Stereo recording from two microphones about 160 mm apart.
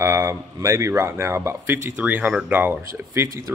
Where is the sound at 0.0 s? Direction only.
15° right (ahead or behind).